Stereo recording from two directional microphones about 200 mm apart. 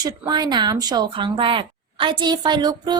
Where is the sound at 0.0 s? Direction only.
20° right (ahead or behind).